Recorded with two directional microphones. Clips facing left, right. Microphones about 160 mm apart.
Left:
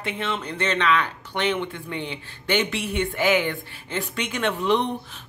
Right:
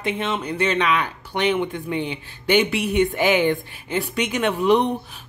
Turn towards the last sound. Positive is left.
turn(degrees=-10)  # may be behind; listen again after turning